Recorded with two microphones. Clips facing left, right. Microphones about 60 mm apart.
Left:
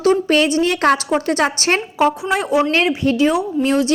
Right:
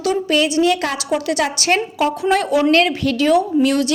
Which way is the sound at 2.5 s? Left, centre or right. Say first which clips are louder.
Even; left.